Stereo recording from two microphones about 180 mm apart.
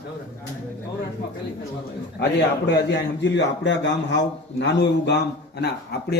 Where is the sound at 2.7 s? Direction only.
75° left (ahead or behind).